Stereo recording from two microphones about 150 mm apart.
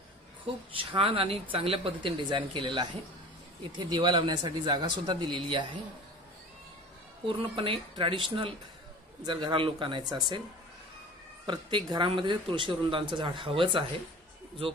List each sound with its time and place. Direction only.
0.7 s speech: 40° right (ahead or behind)
7.2 s speech: 35° right (ahead or behind)
11.4 s speech: 30° right (ahead or behind)